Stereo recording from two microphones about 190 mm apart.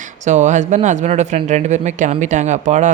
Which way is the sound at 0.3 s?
40° right (ahead or behind).